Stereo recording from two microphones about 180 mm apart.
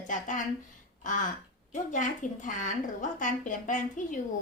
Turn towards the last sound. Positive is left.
turn(degrees=45)  # may be behind; listen again after turning